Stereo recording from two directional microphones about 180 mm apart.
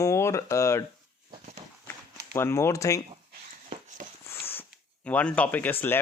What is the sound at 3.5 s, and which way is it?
Dog, 45° right (ahead or behind).